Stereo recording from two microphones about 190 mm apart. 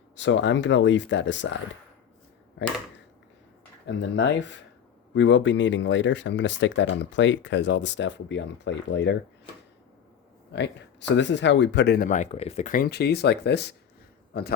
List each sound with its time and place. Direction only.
0.2 s speech: 70° left (ahead or behind)
3.8 s speech: 70° left (ahead or behind)
10.5 s speech: 65° left (ahead or behind)
12.0 s speech: 40° left (ahead or behind); by 14.5 s 55° left (ahead or behind)